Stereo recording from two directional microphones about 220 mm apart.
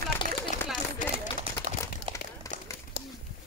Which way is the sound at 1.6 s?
20° left (ahead or behind).